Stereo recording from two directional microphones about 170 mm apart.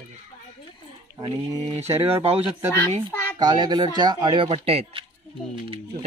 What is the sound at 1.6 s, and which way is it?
Speech, 40° right (ahead or behind).